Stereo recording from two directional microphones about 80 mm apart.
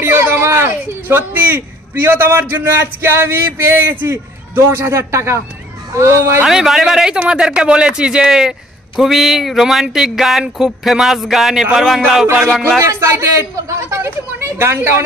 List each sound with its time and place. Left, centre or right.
0.0 s speech: right
6.4 s speech: centre
12.8 s speech: right